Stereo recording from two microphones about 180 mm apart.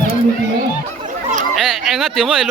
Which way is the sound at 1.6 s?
Centre (ahead or behind).